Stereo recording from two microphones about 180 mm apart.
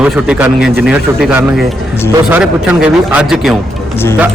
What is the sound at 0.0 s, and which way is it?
A man's voice, 10° right (ahead or behind).